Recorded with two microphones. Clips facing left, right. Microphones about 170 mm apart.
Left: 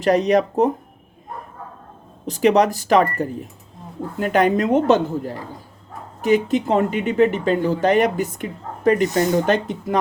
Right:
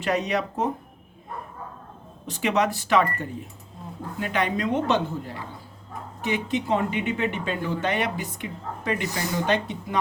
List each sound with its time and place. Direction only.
0.0 s speech: 40° left (ahead or behind)
2.2 s speech: 40° left (ahead or behind)